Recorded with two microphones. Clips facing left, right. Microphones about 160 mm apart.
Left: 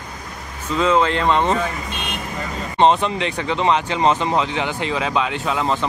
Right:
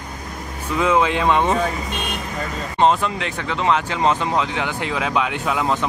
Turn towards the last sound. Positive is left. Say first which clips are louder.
# even
turn(degrees=-5)  # may be behind; listen again after turning